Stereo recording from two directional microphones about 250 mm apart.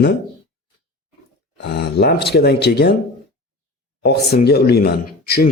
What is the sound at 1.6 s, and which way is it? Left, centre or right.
A man's voice, left.